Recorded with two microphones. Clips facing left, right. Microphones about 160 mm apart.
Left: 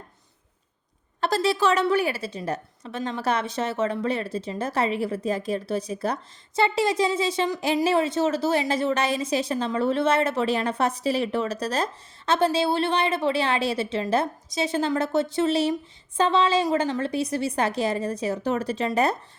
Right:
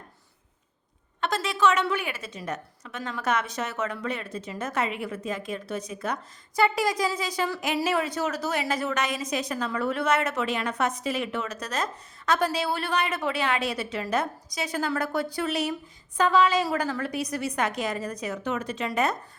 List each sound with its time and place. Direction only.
1.2 s a woman's voice: 35° left (ahead or behind)